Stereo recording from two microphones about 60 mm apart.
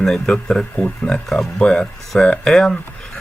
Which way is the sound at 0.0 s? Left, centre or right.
Centre.